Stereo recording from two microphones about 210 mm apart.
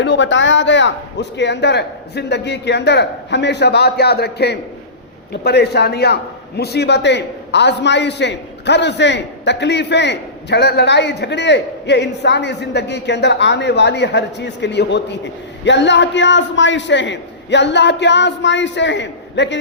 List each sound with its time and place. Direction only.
0.0 s a man's voice: 55° left (ahead or behind)